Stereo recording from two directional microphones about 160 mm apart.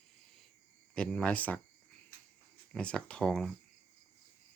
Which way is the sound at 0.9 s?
5° left (ahead or behind).